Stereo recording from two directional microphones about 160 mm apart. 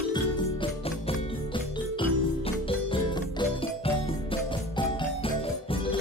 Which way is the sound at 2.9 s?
35° left (ahead or behind).